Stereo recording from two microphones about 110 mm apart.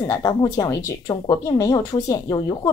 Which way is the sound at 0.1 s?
35° left (ahead or behind).